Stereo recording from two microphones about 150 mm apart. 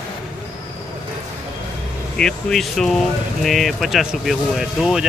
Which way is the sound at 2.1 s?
5° left (ahead or behind).